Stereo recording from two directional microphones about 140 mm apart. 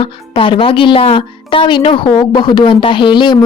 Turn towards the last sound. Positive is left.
turn(degrees=35)  # may be behind; listen again after turning